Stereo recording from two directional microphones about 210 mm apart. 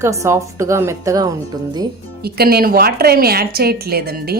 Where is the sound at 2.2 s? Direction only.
45° right (ahead or behind).